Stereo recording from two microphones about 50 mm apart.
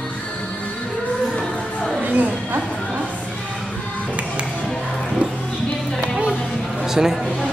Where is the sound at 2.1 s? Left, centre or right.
Right.